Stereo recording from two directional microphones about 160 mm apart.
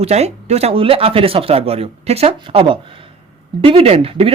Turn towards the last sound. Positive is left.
turn(degrees=-35)  # may be behind; listen again after turning